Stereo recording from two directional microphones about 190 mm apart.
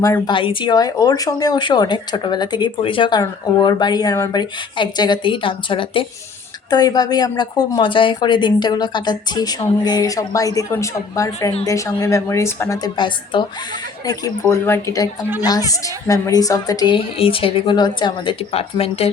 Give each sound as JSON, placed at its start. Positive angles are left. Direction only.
{"t": 0.0, "sound": "a woman's voice", "side_deg": 20}